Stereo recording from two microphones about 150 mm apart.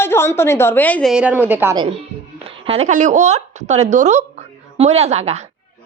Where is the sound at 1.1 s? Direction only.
5° right (ahead or behind).